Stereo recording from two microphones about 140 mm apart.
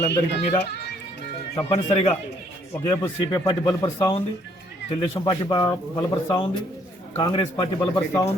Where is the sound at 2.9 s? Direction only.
25° left (ahead or behind).